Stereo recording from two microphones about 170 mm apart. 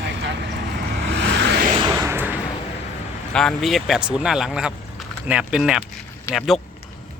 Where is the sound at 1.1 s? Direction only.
90° right.